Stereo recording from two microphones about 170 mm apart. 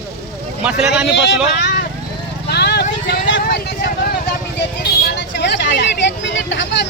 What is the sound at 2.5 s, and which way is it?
Vehicle, 75° left (ahead or behind).